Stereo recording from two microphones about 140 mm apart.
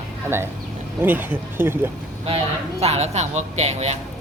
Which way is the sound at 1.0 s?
15° right (ahead or behind).